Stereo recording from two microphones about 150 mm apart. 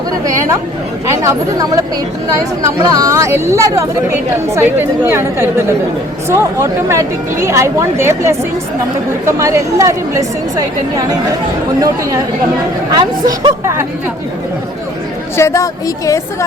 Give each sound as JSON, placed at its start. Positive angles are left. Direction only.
{"t": 1.1, "sound": "speech", "side_deg": -20}
{"t": 13.0, "sound": "speech", "side_deg": -30}
{"t": 15.4, "sound": "a woman's voice", "side_deg": 20}